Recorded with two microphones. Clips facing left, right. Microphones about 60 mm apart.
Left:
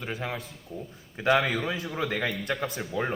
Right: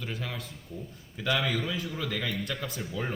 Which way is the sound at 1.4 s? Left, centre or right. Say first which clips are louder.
Left 2 dB; left.